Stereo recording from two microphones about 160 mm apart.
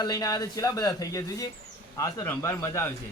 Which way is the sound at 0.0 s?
25° left (ahead or behind).